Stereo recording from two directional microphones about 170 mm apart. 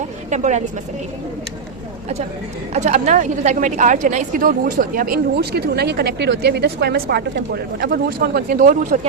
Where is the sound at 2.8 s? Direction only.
45° right (ahead or behind).